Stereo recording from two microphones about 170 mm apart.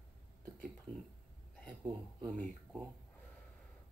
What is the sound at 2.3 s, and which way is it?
Speech, 50° right (ahead or behind).